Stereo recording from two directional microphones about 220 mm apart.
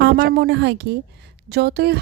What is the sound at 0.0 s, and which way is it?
Speech, 45° right (ahead or behind).